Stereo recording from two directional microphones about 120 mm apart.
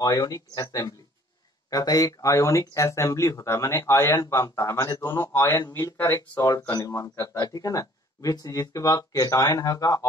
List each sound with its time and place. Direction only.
0.0 s speech: 30° left (ahead or behind)
6.7 s speech: 30° left (ahead or behind)